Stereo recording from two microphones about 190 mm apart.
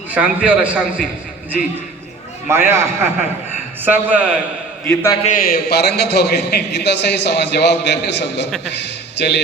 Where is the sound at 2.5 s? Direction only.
15° right (ahead or behind).